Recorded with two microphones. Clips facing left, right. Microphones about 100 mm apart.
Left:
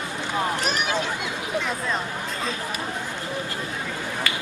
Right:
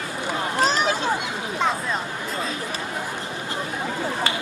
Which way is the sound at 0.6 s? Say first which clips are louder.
Right 5 dB; 30° right (ahead or behind).